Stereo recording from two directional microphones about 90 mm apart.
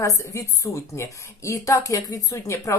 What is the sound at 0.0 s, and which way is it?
A woman's voice, 35° left (ahead or behind).